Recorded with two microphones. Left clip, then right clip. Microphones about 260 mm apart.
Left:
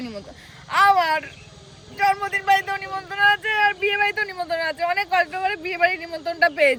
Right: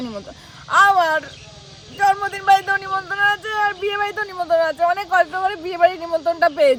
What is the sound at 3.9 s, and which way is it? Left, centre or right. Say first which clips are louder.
Speech: even; centre.